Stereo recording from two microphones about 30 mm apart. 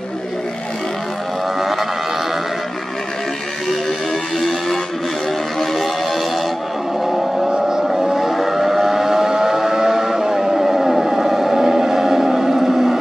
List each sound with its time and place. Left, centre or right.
1.6 s vehicle: centre
5.6 s music: centre
7.5 s vehicle: centre